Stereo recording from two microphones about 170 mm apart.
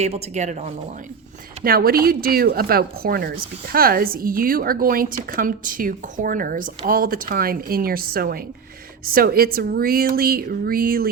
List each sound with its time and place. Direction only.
0.0 s speech: 40° right (ahead or behind)
1.6 s speech: 60° right (ahead or behind)